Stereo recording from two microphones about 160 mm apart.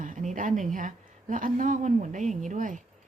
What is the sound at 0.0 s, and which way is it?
A woman's voice, 55° right (ahead or behind).